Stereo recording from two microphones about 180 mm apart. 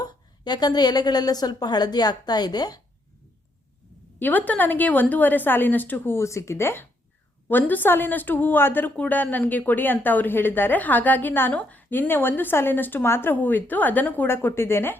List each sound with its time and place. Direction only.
0.0 s a woman's voice: 25° left (ahead or behind)
4.2 s a woman's voice: 10° left (ahead or behind)